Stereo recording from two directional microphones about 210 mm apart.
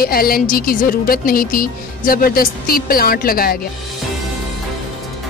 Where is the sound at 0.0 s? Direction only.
45° left (ahead or behind).